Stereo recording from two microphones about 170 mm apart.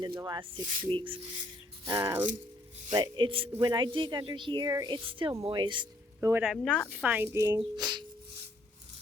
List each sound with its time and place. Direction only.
0.0 s speech: 25° right (ahead or behind)
1.8 s a woman's voice: 20° right (ahead or behind)
2.9 s speech: 25° right (ahead or behind)
6.1 s a woman's voice: 10° right (ahead or behind)
6.5 s speech: centre (ahead or behind)
6.9 s a woman's voice: 10° right (ahead or behind); by 8.0 s 25° right (ahead or behind)